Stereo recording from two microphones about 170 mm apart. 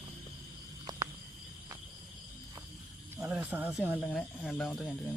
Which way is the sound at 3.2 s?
15° right (ahead or behind).